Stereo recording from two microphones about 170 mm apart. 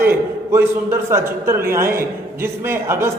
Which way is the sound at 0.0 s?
15° right (ahead or behind).